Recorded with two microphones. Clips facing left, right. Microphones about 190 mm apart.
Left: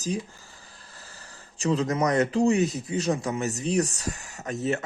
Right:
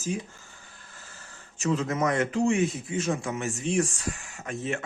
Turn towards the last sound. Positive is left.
turn(degrees=40)  # may be behind; listen again after turning